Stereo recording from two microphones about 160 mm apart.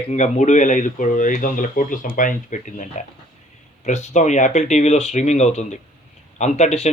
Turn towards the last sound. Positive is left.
turn(degrees=45)  # may be behind; listen again after turning